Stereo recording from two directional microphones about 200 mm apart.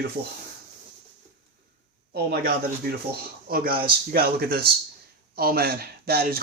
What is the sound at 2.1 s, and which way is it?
Speech, 50° right (ahead or behind).